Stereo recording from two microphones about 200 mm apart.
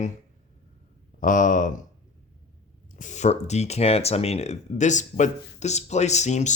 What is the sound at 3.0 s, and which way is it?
Speech, 35° left (ahead or behind).